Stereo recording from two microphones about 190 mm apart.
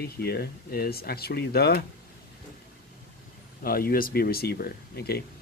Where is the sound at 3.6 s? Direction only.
50° left (ahead or behind).